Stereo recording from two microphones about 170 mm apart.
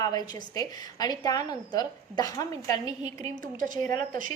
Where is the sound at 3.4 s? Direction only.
50° right (ahead or behind).